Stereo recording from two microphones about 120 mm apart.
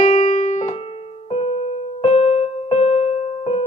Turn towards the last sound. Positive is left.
turn(degrees=55)  # may be behind; listen again after turning